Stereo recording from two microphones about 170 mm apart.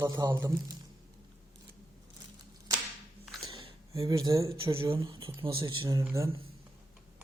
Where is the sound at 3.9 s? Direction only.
20° right (ahead or behind).